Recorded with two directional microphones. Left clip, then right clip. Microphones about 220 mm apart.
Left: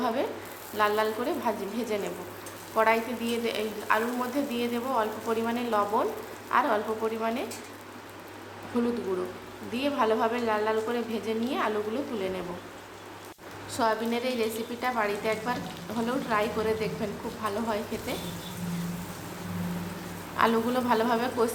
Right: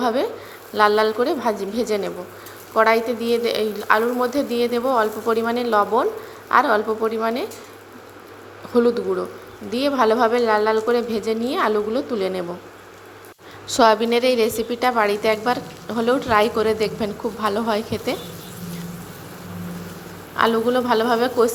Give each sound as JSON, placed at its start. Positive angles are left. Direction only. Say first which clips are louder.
{"t": 0.0, "sound": "a woman's voice", "louder": "right 8 dB", "side_deg": -20}
{"t": 9.7, "sound": "a woman's voice", "louder": "right 8 dB", "side_deg": -25}
{"t": 13.7, "sound": "a woman's voice", "louder": "right 12 dB", "side_deg": -30}
{"t": 20.3, "sound": "a woman's voice", "louder": "right 7 dB", "side_deg": -20}